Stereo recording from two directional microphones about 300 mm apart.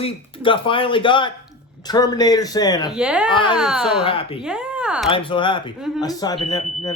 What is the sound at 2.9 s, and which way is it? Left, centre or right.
Speech, centre.